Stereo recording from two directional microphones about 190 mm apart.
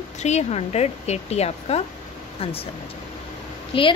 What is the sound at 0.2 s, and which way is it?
Speech, 35° left (ahead or behind).